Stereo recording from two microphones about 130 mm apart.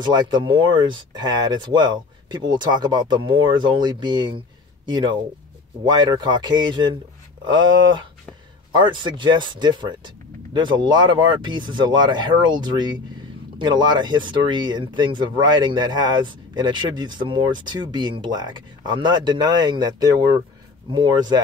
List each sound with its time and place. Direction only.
0.0 s speech: 35° right (ahead or behind)
8.7 s speech: 35° right (ahead or behind)